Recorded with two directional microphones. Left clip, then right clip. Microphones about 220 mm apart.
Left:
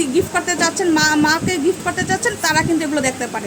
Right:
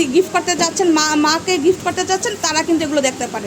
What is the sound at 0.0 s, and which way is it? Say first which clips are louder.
A woman's voice: right 3 dB; 10° right (ahead or behind).